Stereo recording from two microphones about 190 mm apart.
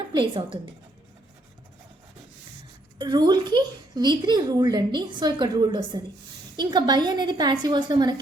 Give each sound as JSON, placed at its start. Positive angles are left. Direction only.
{"t": 0.1, "sound": "a woman's voice", "side_deg": -25}
{"t": 3.0, "sound": "a woman's voice", "side_deg": -20}